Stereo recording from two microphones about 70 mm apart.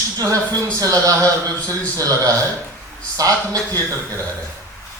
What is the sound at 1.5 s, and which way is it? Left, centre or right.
Speech, left.